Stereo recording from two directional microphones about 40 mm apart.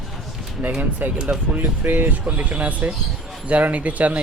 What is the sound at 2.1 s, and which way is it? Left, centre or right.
Speech, right.